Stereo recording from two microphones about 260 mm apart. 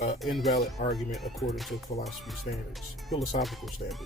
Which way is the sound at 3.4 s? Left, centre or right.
Centre.